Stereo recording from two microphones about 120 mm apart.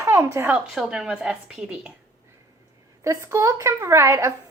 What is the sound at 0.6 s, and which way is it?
A woman's voice, centre (ahead or behind).